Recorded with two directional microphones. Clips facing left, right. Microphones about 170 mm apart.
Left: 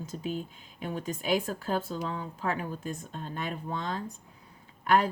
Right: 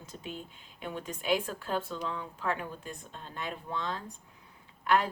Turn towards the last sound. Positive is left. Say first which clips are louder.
# left 3 dB
turn(degrees=40)  # may be behind; listen again after turning